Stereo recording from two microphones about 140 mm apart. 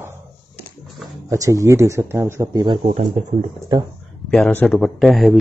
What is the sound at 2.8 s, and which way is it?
Speech, 55° right (ahead or behind).